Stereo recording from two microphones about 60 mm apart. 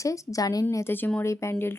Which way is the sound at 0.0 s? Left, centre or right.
Left.